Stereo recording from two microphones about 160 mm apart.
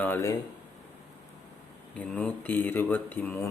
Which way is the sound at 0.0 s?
15° left (ahead or behind).